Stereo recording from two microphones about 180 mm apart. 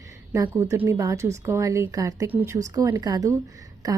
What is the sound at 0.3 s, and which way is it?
A woman's voice, 15° right (ahead or behind).